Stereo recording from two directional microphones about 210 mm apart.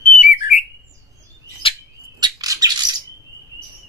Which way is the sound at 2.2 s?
15° right (ahead or behind).